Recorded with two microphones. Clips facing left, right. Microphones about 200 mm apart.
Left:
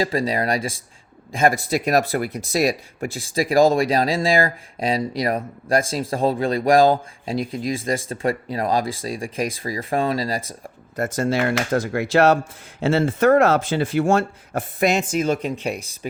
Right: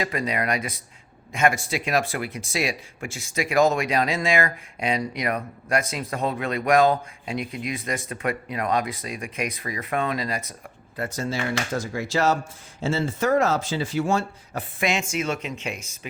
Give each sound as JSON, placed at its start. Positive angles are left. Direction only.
{"t": 0.0, "sound": "speech", "side_deg": 30}
{"t": 10.6, "sound": "speech", "side_deg": 45}